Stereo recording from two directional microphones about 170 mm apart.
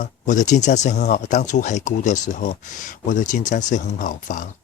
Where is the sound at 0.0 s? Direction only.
45° left (ahead or behind).